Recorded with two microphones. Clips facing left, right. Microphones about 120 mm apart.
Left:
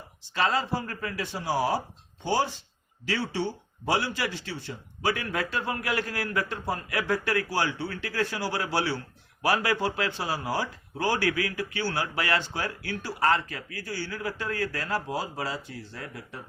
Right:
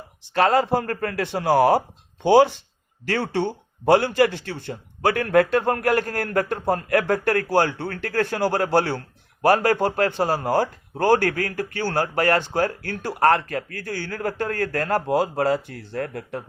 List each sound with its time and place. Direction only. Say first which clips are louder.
0.3 s speech: right 8 dB; 55° right (ahead or behind)
3.1 s speech: right 6 dB; 55° right (ahead or behind)